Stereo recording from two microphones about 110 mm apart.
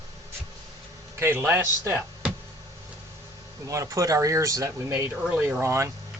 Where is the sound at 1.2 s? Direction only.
20° right (ahead or behind).